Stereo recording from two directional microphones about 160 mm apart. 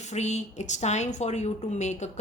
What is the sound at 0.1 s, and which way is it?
A woman's voice, 45° left (ahead or behind).